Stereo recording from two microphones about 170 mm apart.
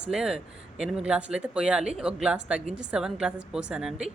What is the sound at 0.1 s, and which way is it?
Speech, 5° right (ahead or behind).